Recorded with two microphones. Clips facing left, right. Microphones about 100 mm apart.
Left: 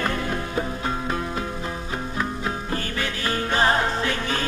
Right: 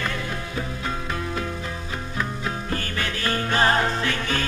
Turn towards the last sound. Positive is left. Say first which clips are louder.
# even
turn(degrees=20)  # may be behind; listen again after turning